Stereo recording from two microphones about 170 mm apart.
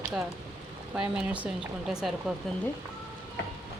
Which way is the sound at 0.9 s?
5° right (ahead or behind).